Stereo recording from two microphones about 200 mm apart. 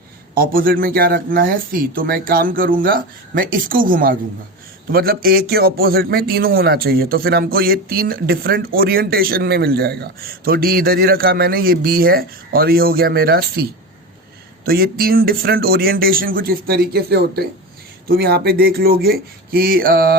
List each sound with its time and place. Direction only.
0.3 s a man's voice: 45° right (ahead or behind)